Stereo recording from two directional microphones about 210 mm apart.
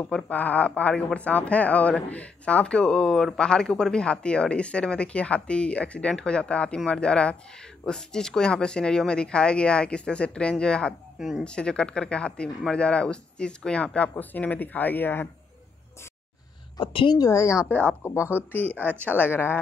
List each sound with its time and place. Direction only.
0.0 s speech: 5° left (ahead or behind)
16.7 s a woman's voice: 25° left (ahead or behind)